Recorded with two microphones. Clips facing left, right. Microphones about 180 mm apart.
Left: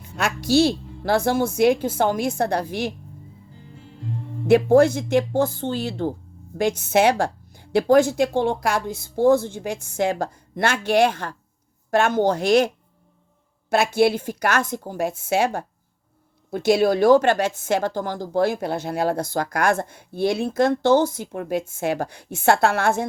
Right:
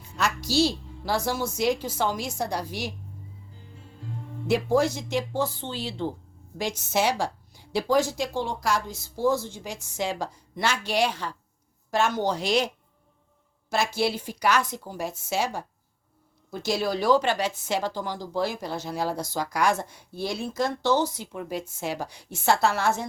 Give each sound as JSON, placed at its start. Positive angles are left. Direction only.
{"t": 0.2, "sound": "a woman's voice", "side_deg": 55}
{"t": 4.4, "sound": "a woman's voice", "side_deg": 55}